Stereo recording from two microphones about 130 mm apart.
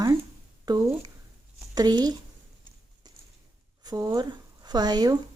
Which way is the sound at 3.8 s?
30° right (ahead or behind).